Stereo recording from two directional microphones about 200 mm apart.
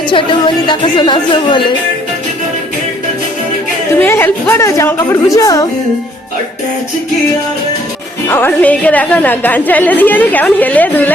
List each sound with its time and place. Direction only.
0.1 s a woman's voice: 25° left (ahead or behind)
3.9 s a woman's voice: 10° left (ahead or behind)
8.3 s a woman's voice: 10° left (ahead or behind)